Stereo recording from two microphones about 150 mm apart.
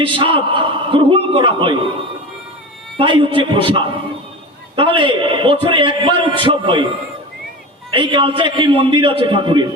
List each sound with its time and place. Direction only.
0.0 s a man's voice: 35° right (ahead or behind)
3.0 s a man's voice: 35° right (ahead or behind)
7.9 s a man's voice: 35° right (ahead or behind)